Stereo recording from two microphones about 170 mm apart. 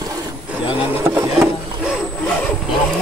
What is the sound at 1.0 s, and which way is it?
Wood, 15° right (ahead or behind).